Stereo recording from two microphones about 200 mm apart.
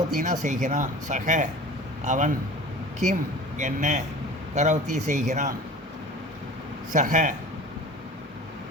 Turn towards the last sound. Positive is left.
turn(degrees=-40)  # may be behind; listen again after turning